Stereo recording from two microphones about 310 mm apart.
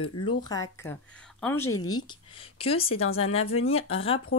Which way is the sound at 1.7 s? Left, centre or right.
Left.